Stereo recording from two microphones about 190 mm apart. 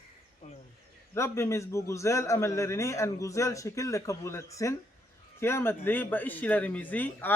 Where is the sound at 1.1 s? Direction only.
15° left (ahead or behind).